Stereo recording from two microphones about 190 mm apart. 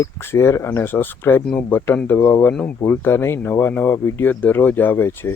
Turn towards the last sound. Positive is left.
turn(degrees=15)  # may be behind; listen again after turning